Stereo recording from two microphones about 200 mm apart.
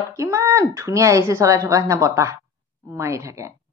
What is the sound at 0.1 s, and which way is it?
Speech, 15° right (ahead or behind).